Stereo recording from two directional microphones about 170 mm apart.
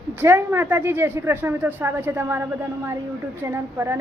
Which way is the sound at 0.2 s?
15° right (ahead or behind).